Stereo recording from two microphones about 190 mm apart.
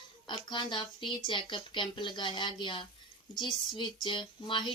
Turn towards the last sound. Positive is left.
turn(degrees=25)  # may be behind; listen again after turning